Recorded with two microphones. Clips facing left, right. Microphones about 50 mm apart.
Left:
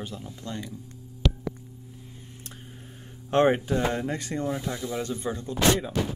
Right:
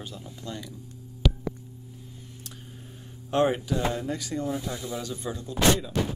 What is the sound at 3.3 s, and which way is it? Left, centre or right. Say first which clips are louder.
Speech: left 3 dB; left.